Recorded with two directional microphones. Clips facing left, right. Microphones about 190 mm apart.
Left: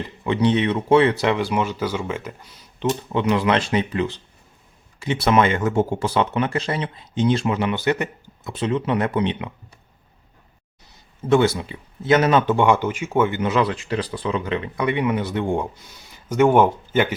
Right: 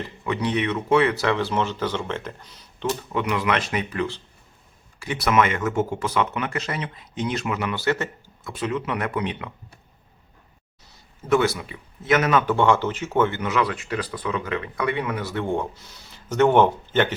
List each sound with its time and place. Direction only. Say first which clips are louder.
0.3 s speech: left 5 dB; 25° left (ahead or behind); by 2.9 s 10° left (ahead or behind)
3.1 s speech: left 5 dB; 25° left (ahead or behind)
8.5 s speech: left 5 dB; 30° left (ahead or behind)
11.3 s speech: left 3 dB; 25° left (ahead or behind)
12.5 s speech: left 2 dB; 15° left (ahead or behind)
13.4 s speech: left 3 dB; 25° left (ahead or behind); by 17.2 s 10° left (ahead or behind)